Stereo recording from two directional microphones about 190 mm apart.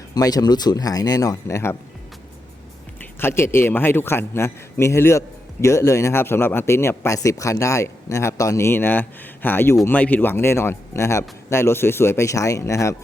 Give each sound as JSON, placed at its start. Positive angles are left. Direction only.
{"t": 0.1, "sound": "speech", "side_deg": 20}
{"t": 3.0, "sound": "a man's voice", "side_deg": 10}